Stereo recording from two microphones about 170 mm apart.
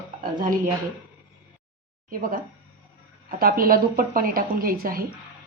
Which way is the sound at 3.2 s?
60° right (ahead or behind).